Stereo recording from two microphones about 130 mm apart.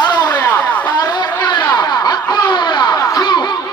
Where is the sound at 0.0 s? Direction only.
25° left (ahead or behind).